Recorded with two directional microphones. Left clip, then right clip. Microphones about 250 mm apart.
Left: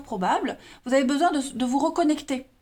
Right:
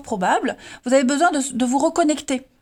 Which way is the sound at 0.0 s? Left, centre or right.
Right.